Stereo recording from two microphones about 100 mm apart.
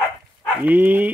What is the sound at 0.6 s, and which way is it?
Speech, 20° right (ahead or behind).